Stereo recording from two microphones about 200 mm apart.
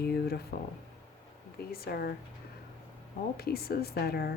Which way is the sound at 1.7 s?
50° left (ahead or behind).